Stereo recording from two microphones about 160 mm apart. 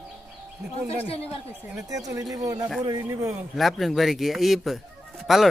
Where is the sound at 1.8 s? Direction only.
20° right (ahead or behind).